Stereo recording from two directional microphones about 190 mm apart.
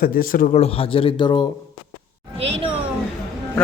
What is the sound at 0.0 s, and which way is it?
Speech, 50° left (ahead or behind).